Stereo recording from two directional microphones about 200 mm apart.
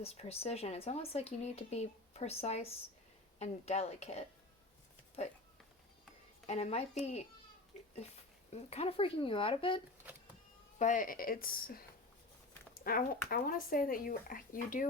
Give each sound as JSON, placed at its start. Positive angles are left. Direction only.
{"t": 0.0, "sound": "speech", "side_deg": 30}
{"t": 6.5, "sound": "speech", "side_deg": 30}
{"t": 8.5, "sound": "speech", "side_deg": 30}
{"t": 10.8, "sound": "speech", "side_deg": 40}